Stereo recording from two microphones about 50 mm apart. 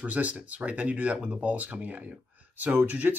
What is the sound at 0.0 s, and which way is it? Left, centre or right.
Speech, right.